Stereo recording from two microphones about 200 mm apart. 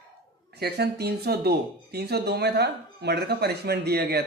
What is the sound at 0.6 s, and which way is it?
Speech, 55° right (ahead or behind).